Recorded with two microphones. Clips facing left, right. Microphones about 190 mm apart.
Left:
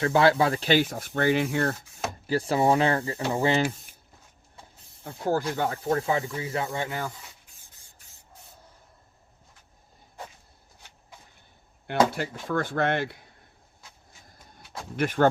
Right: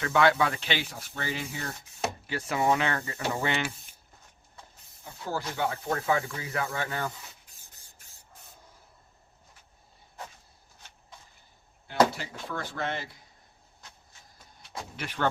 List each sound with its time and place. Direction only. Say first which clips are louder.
0.0 s speech: left 3 dB; 35° left (ahead or behind); by 1.7 s 65° left (ahead or behind)
2.2 s speech: left 5 dB; 35° left (ahead or behind)
5.0 s speech: left 8 dB; 50° left (ahead or behind)
5.9 s speech: left 3 dB; 30° left (ahead or behind)
11.9 s speech: left 1 dB; 55° left (ahead or behind)
14.9 s speech: left 8 dB; 50° left (ahead or behind)